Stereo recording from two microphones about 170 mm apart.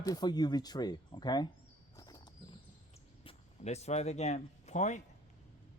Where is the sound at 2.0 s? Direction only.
25° left (ahead or behind).